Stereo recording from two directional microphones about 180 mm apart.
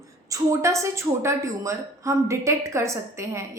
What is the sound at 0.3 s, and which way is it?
A woman's voice, 15° right (ahead or behind).